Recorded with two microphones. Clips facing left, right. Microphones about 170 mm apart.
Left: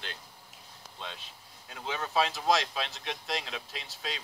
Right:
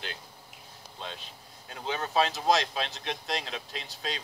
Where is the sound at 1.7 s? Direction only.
Centre (ahead or behind).